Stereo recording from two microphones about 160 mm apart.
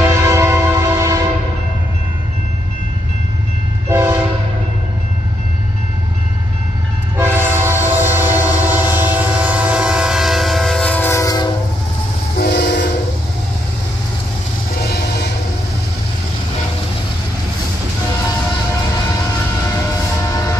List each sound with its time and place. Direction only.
0.2 s train: 20° right (ahead or behind)
3.9 s train: 15° right (ahead or behind)
7.2 s train: 15° right (ahead or behind); by 11.4 s 20° left (ahead or behind)
12.4 s train: 90° left
14.8 s music: 80° left